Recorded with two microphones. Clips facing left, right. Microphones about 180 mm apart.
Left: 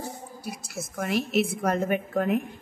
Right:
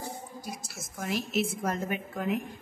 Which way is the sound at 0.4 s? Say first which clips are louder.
Left 5 dB; 65° left (ahead or behind).